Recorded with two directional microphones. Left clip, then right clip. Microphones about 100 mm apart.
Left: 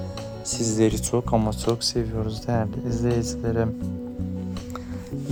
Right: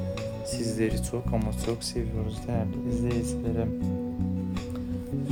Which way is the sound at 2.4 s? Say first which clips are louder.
Left 5 dB; 90° left.